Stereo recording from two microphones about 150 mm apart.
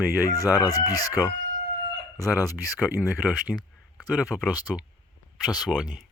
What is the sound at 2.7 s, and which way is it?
Speech, 15° right (ahead or behind).